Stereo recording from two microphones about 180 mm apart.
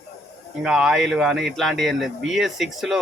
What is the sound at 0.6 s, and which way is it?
Speech, 5° right (ahead or behind).